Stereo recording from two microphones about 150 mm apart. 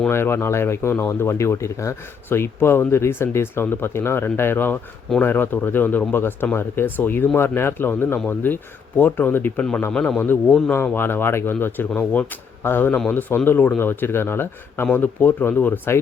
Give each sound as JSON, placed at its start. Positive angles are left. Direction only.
{"t": 0.1, "sound": "speech", "side_deg": 15}